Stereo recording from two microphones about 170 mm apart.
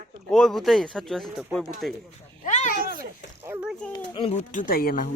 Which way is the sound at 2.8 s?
60° right (ahead or behind).